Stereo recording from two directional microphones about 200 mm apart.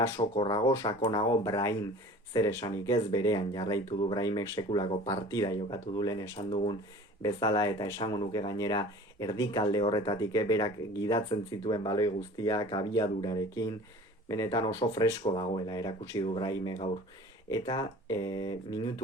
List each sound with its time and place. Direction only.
0.2 s speech: 25° left (ahead or behind)